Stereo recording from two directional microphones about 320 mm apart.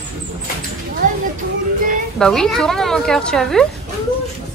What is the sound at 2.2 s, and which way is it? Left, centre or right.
A woman's voice, centre.